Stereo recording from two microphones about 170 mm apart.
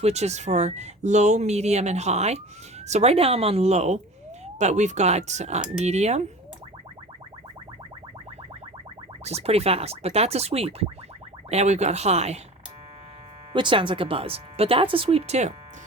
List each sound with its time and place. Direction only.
0.0 s speech: 40° right (ahead or behind)
9.2 s speech: 35° right (ahead or behind)
13.5 s speech: 30° right (ahead or behind)